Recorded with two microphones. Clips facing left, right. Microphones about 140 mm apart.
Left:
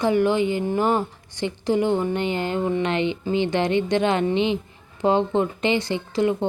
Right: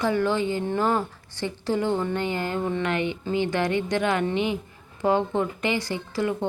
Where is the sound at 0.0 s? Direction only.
15° left (ahead or behind).